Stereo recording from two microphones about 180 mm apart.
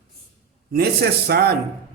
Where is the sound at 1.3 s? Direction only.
60° right (ahead or behind).